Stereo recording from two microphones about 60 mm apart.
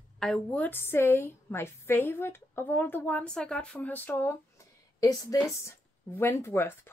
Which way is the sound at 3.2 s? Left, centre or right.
Centre.